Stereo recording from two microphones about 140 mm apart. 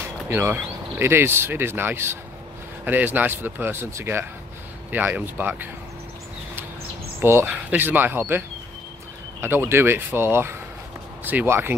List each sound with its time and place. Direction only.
0.0 s speech: 15° right (ahead or behind)
7.2 s speech: 15° right (ahead or behind)